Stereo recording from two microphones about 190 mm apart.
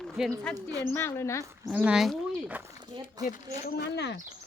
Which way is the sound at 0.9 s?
10° left (ahead or behind).